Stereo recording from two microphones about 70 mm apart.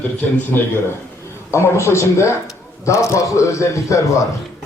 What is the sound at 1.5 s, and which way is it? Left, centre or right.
Speech, left.